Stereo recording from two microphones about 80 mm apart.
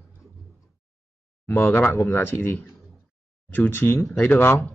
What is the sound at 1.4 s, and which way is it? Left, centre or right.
A man's voice, left.